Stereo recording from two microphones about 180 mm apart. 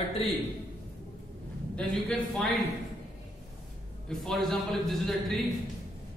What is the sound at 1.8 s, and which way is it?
Speech, 5° left (ahead or behind).